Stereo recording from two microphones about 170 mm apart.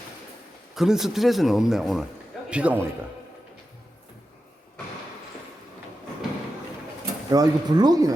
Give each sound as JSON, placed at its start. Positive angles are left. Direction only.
{"t": 0.8, "sound": "a man's voice", "side_deg": 0}
{"t": 7.3, "sound": "speech", "side_deg": -25}